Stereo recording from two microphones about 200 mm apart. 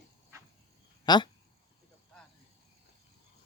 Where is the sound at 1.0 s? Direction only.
20° left (ahead or behind).